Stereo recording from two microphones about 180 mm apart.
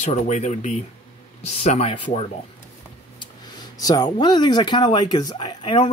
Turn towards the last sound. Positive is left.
turn(degrees=30)  # may be behind; listen again after turning